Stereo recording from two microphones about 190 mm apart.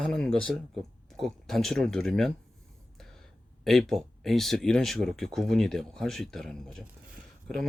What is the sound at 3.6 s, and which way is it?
Speech, centre (ahead or behind).